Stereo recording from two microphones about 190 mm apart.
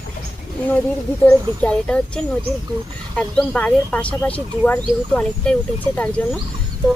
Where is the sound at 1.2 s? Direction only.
5° left (ahead or behind).